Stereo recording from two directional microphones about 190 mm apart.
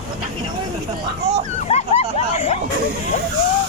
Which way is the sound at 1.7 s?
35° left (ahead or behind).